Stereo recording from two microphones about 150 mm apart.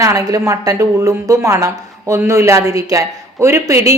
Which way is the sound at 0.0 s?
20° right (ahead or behind).